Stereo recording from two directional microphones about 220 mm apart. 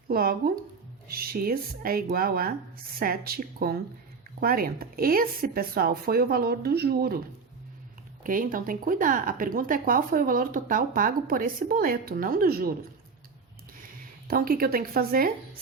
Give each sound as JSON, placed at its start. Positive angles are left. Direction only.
{"t": 0.1, "sound": "speech", "side_deg": -40}
{"t": 8.2, "sound": "speech", "side_deg": -40}
{"t": 14.3, "sound": "speech", "side_deg": -40}